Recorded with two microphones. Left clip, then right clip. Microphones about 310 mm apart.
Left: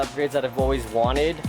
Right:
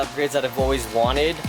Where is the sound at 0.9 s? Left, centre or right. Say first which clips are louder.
Right 2 dB; left.